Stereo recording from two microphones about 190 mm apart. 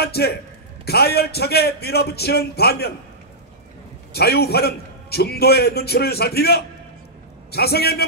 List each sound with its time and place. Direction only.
0.0 s a man's voice: 55° left (ahead or behind)
4.1 s a man's voice: 55° left (ahead or behind)